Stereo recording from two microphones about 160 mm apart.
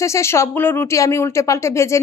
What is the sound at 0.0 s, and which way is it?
Speech, 15° left (ahead or behind).